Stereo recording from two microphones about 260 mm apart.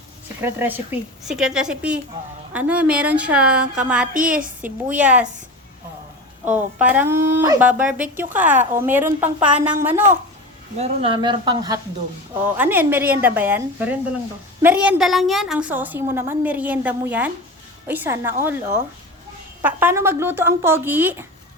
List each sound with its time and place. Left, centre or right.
0.4 s a woman's voice: centre
6.4 s a woman's voice: centre
10.8 s a woman's voice: centre
19.6 s a woman's voice: centre